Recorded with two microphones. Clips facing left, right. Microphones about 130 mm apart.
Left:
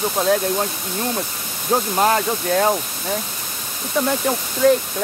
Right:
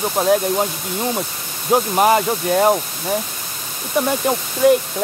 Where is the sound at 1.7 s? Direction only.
10° right (ahead or behind).